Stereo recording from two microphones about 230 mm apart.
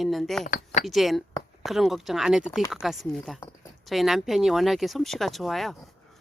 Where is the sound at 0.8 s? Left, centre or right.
Centre.